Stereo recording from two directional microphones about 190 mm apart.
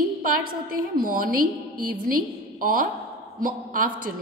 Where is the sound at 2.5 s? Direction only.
45° right (ahead or behind).